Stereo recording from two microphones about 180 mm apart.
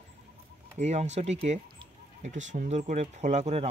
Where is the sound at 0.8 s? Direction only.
40° right (ahead or behind).